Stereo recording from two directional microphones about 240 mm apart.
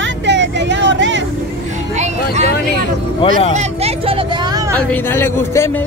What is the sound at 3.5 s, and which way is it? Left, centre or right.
Speech, right.